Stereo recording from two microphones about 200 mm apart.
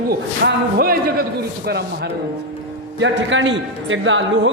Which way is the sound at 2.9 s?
70° right (ahead or behind).